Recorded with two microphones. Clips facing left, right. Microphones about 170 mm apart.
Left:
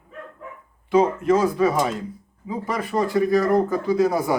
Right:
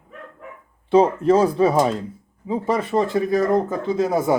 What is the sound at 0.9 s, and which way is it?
Speech, 30° right (ahead or behind).